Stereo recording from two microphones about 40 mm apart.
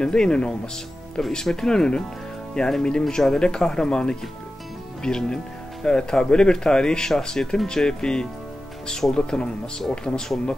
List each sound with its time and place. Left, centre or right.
0.0 s speech: centre